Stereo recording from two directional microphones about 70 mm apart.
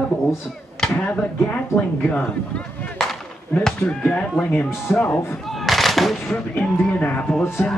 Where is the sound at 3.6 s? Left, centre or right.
Centre; by 5.0 s left.